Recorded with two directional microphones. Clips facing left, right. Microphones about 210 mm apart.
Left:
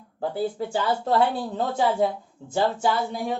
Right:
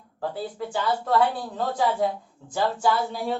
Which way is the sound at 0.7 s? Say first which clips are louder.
Right 2 dB; 25° left (ahead or behind).